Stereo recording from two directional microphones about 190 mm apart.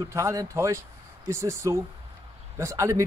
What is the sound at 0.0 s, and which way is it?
Speech, 15° right (ahead or behind).